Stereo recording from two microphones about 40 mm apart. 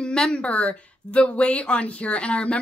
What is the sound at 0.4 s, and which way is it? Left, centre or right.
Speech, left.